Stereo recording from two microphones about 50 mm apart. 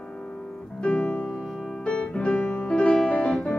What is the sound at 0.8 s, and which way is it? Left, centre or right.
Music, left.